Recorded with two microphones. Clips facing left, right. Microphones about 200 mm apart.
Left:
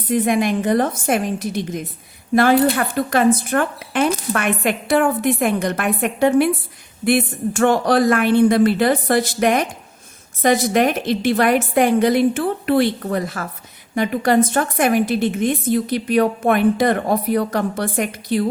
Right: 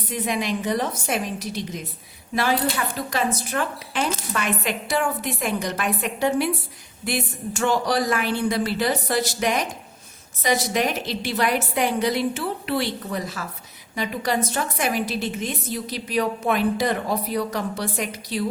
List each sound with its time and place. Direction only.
0.1 s a woman's voice: 50° left (ahead or behind)